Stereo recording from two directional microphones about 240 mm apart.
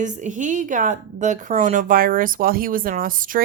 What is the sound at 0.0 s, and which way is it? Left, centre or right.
A woman's voice, right.